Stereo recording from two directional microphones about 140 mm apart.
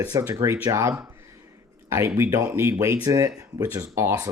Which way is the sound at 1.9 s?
20° right (ahead or behind).